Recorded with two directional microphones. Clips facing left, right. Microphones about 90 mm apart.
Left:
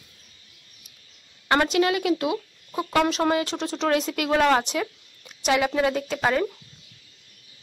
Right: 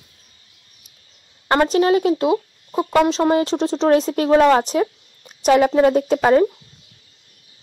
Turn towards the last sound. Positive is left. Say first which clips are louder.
# right 9 dB
turn(degrees=-35)  # may be behind; listen again after turning